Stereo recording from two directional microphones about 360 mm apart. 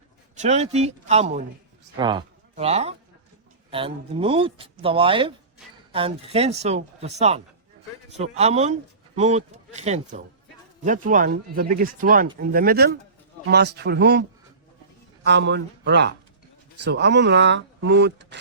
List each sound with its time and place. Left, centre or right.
0.3 s speech: centre